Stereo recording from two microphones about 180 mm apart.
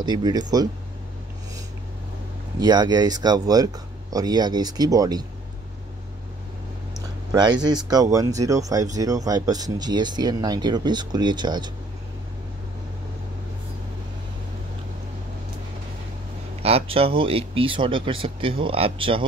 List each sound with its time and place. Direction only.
0.0 s speech: 25° right (ahead or behind)
2.6 s speech: 20° right (ahead or behind)
7.3 s speech: 25° right (ahead or behind)
16.6 s speech: 30° right (ahead or behind)